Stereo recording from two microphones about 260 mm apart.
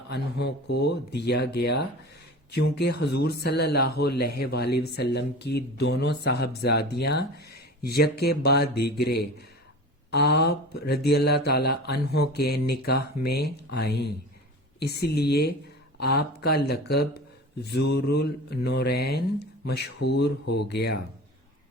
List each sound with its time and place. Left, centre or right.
0.1 s speech: left